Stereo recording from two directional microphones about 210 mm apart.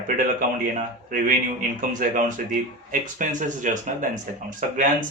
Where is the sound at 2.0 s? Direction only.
40° right (ahead or behind).